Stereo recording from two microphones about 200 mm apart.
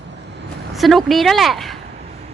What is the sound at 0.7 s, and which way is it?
Speech, centre (ahead or behind).